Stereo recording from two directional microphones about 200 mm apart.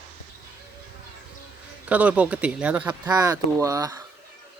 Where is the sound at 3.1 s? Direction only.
20° right (ahead or behind).